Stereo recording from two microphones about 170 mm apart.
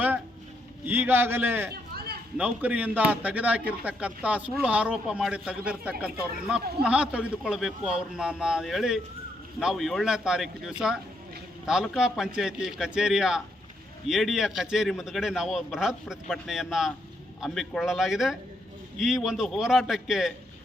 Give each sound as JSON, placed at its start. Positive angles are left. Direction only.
{"t": 0.9, "sound": "a man's voice", "side_deg": -10}